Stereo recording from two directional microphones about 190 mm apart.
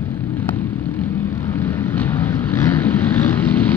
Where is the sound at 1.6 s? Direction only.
10° left (ahead or behind).